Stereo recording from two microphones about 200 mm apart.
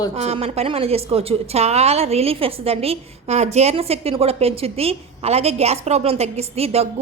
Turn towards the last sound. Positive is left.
turn(degrees=-30)  # may be behind; listen again after turning